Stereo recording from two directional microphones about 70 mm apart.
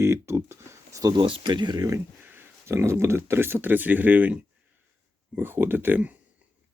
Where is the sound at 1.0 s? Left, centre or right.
Right.